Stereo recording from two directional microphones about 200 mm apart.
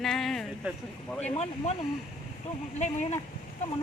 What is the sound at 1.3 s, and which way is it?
Speech, 30° left (ahead or behind).